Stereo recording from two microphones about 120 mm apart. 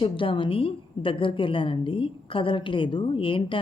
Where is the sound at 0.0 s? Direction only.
45° left (ahead or behind).